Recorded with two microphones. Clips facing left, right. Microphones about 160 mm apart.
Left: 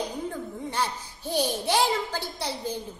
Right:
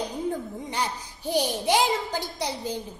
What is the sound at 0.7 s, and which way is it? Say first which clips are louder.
A woman's voice: even; 15° right (ahead or behind).